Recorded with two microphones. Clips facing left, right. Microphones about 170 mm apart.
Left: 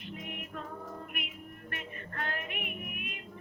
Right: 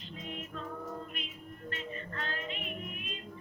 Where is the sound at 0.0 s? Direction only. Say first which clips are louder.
Left 3 dB; 60° left (ahead or behind).